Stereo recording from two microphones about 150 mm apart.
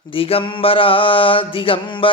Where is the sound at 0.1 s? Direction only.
40° left (ahead or behind).